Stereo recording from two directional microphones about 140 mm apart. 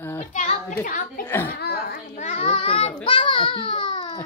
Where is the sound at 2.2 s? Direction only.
50° left (ahead or behind).